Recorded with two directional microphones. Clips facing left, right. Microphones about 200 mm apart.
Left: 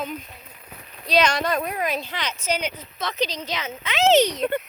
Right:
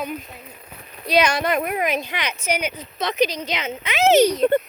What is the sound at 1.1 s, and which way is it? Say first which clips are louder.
Speech: right 2 dB; 10° right (ahead or behind).